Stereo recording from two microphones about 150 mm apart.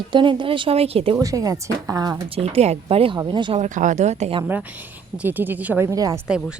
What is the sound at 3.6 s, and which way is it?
Speech, 55° right (ahead or behind).